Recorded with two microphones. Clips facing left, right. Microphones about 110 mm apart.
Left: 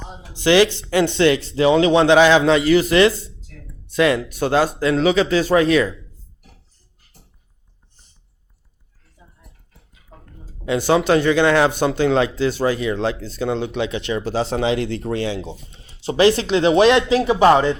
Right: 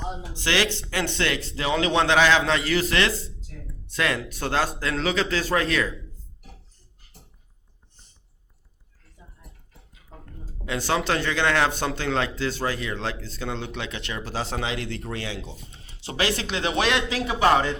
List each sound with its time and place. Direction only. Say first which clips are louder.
0.3 s speech: left 11 dB; 15° left (ahead or behind)
3.9 s speech: left 9 dB; 15° left (ahead or behind)
10.7 s speech: left 9 dB; 15° left (ahead or behind)